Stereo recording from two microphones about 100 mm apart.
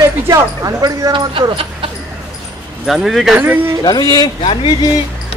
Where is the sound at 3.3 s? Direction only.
20° right (ahead or behind).